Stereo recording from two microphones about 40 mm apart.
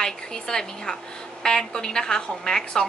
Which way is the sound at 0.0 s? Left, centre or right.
Centre.